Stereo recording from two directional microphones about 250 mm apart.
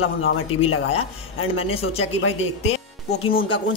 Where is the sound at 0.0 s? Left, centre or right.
Left.